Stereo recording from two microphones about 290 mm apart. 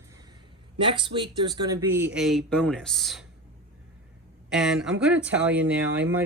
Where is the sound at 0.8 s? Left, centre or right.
Centre.